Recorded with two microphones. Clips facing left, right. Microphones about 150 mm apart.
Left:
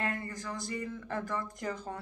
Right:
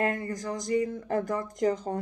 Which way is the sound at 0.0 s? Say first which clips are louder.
Right 7 dB; 45° right (ahead or behind).